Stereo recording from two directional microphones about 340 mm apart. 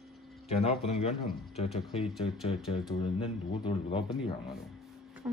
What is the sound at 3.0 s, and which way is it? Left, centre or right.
A man's voice, centre.